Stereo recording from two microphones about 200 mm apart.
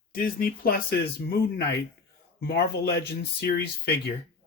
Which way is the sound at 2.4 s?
50° left (ahead or behind).